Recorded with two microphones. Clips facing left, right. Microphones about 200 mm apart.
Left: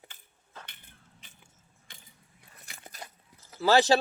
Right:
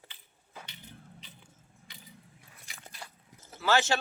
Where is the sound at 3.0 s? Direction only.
40° left (ahead or behind).